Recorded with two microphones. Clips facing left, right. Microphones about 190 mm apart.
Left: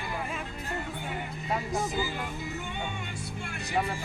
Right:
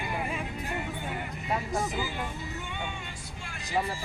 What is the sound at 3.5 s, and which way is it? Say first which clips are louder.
Music: even; 60° left (ahead or behind).